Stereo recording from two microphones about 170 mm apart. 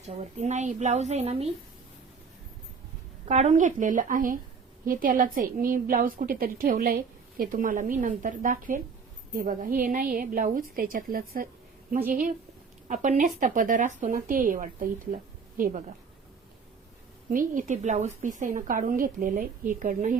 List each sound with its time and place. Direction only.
0.0 s a woman's voice: 40° right (ahead or behind)
3.2 s a woman's voice: 40° right (ahead or behind); by 11.4 s 60° right (ahead or behind)
12.9 s speech: 45° right (ahead or behind)
17.3 s speech: 50° right (ahead or behind)